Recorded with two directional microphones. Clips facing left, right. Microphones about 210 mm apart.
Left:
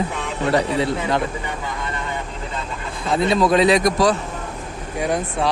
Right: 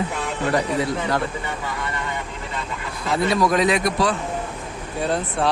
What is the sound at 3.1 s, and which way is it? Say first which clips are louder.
A man's voice: left 2 dB; 25° left (ahead or behind).